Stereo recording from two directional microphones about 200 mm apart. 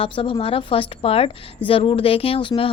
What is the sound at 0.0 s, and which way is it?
A woman's voice, 25° left (ahead or behind).